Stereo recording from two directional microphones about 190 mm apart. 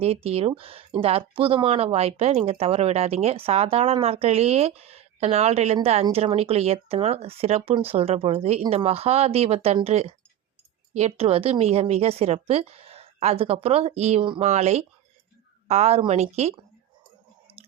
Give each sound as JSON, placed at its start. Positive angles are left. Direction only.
{"t": 0.0, "sound": "speech", "side_deg": -30}